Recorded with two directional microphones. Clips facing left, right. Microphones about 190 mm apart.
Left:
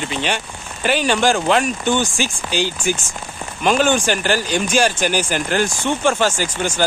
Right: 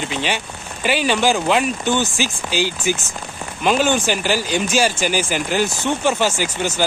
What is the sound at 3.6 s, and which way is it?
Speech, 10° right (ahead or behind).